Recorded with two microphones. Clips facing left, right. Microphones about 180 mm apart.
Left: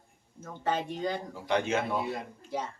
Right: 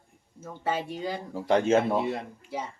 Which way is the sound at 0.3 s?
10° right (ahead or behind).